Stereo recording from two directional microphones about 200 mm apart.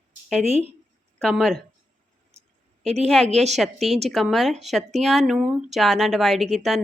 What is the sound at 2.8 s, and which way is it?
Speech, 30° right (ahead or behind).